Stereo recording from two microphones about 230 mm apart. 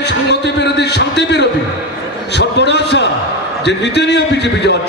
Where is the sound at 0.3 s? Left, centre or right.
Left.